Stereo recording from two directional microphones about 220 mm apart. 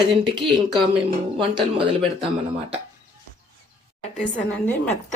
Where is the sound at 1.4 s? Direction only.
25° right (ahead or behind).